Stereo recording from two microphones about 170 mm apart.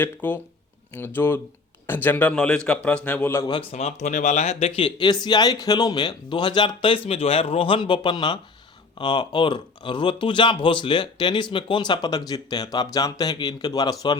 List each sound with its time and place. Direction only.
0.0 s a man's voice: 10° left (ahead or behind)
3.5 s speech: 35° left (ahead or behind)